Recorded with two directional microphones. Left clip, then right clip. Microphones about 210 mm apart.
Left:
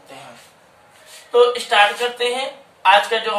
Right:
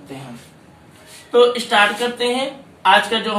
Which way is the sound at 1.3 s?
10° left (ahead or behind).